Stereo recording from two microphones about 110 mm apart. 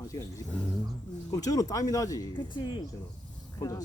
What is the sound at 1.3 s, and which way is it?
Speech, 35° left (ahead or behind).